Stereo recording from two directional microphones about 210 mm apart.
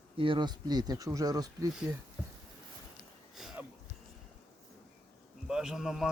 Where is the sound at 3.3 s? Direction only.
Centre (ahead or behind).